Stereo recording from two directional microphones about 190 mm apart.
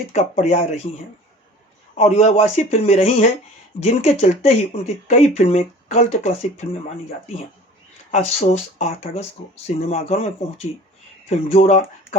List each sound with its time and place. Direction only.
0.1 s speech: 35° left (ahead or behind)
2.0 s speech: 35° left (ahead or behind)
8.1 s speech: 35° left (ahead or behind)